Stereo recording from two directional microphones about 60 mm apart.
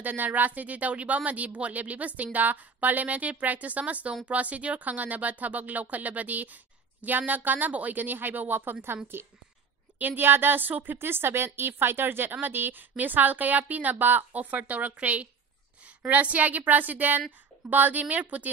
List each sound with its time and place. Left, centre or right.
0.0 s a woman's voice: right